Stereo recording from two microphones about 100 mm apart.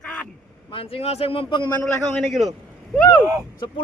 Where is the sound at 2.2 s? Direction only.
Centre (ahead or behind).